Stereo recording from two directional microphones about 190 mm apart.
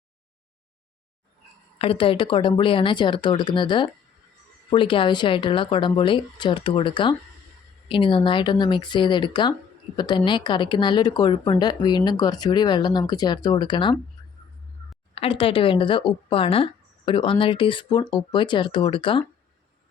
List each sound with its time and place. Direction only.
1.8 s speech: 30° left (ahead or behind)
15.1 s speech: 30° left (ahead or behind)